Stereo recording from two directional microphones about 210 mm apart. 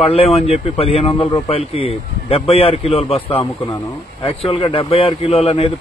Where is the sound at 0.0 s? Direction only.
30° left (ahead or behind).